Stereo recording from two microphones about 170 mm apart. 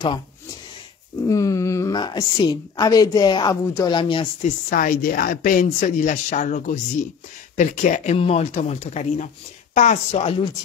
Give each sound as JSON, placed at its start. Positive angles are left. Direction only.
{"t": 1.3, "sound": "a woman's voice", "side_deg": 20}
{"t": 4.6, "sound": "speech", "side_deg": 50}